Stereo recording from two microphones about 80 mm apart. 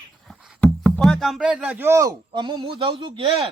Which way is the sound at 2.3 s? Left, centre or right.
Right.